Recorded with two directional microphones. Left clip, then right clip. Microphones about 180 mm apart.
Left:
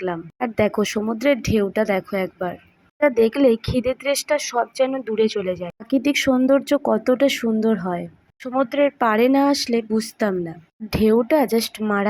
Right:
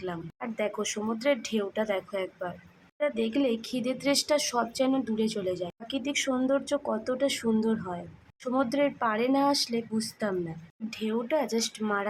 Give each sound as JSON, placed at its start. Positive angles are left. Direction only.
{"t": 0.0, "sound": "speech", "side_deg": 30}
{"t": 3.0, "sound": "speech", "side_deg": 35}